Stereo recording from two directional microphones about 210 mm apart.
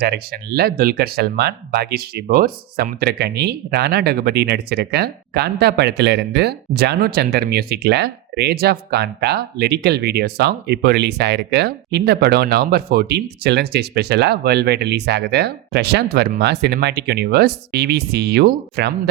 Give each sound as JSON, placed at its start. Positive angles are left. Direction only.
{"t": 0.0, "sound": "speech", "side_deg": -50}